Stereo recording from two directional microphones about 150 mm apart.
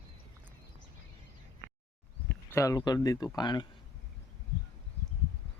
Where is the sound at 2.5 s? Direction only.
20° left (ahead or behind).